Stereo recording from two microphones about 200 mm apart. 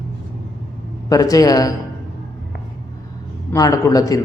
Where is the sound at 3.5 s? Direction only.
20° left (ahead or behind).